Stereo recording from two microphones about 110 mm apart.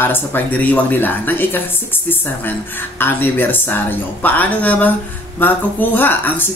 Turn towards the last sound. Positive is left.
turn(degrees=15)  # may be behind; listen again after turning